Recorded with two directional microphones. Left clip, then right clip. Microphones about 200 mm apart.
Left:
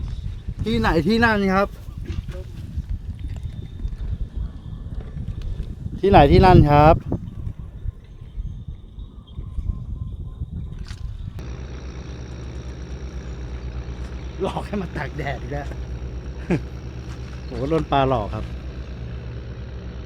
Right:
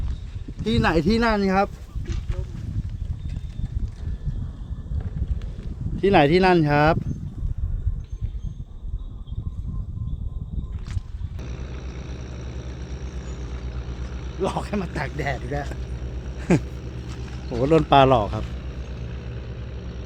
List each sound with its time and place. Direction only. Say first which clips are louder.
0.6 s speech: left 1 dB; 10° left (ahead or behind); by 1.7 s 30° left (ahead or behind)
6.0 s speech: left 3 dB; 20° left (ahead or behind)
11.3 s vehicle: even; 5° left (ahead or behind)
14.4 s a sound: even; 20° right (ahead or behind)
14.9 s speech: right 1 dB; 20° right (ahead or behind)
15.9 s a sound: even; 5° left (ahead or behind)
16.6 s vehicle: even; 5° left (ahead or behind)
17.6 s speech: right 4 dB; 35° right (ahead or behind)
18.3 s vehicle: right 1 dB; centre (ahead or behind)